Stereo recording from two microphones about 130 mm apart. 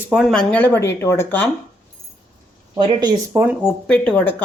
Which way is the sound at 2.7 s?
40° right (ahead or behind).